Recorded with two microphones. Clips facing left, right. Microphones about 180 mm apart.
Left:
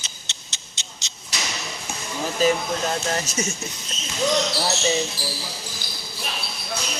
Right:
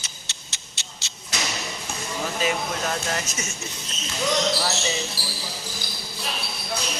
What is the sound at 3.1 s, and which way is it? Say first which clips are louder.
Speech: left 4 dB; 30° left (ahead or behind).